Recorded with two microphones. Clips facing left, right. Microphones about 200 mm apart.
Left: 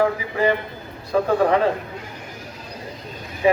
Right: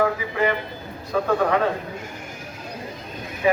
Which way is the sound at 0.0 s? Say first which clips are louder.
Left 2 dB; 30° left (ahead or behind).